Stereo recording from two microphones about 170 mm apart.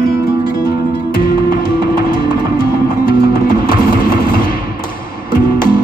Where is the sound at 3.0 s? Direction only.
60° left (ahead or behind).